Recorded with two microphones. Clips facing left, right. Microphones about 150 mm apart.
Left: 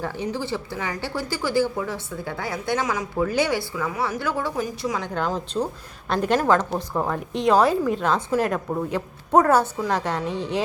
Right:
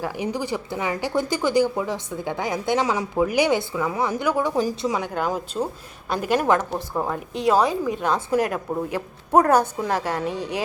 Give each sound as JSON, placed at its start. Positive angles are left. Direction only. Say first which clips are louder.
{"t": 0.0, "sound": "a woman's voice", "louder": "right 1 dB", "side_deg": -10}
{"t": 3.2, "sound": "speech", "louder": "right 2 dB", "side_deg": -15}
{"t": 4.5, "sound": "a woman's voice", "louder": "right 4 dB", "side_deg": -25}
{"t": 5.0, "sound": "speech", "louder": "right 1 dB", "side_deg": -10}
{"t": 7.9, "sound": "speech", "louder": "left 1 dB", "side_deg": -15}